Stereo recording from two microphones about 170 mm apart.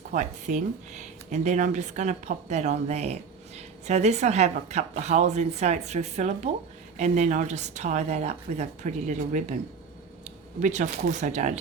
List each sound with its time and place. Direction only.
0.1 s a woman's voice: 45° right (ahead or behind)
10.6 s speech: 45° right (ahead or behind)